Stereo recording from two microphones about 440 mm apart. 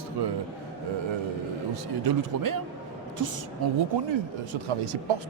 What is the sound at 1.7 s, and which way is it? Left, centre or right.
Speech, right.